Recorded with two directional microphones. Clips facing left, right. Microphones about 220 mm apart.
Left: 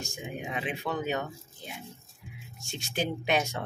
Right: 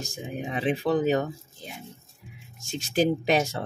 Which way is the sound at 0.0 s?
35° right (ahead or behind).